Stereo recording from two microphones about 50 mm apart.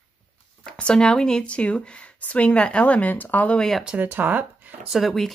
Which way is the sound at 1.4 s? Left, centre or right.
Left.